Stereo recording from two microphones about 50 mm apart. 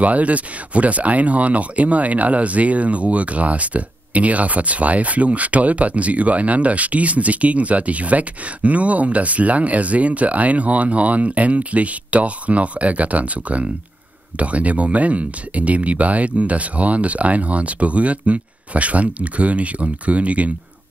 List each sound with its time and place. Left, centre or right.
0.0 s speech: right